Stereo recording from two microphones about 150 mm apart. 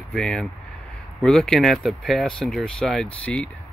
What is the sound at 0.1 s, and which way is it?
Speech, 5° left (ahead or behind).